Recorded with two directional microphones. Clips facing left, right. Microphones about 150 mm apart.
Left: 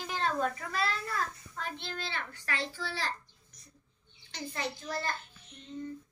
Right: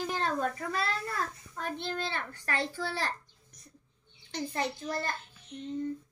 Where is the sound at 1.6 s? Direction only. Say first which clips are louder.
Right 5 dB; 50° right (ahead or behind).